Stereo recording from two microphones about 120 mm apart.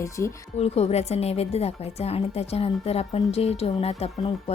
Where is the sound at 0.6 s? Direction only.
60° left (ahead or behind).